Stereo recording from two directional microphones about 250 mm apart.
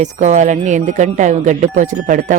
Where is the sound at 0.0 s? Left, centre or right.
Right.